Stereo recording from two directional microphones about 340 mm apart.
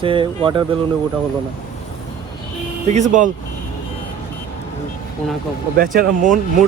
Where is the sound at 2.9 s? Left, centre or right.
Right.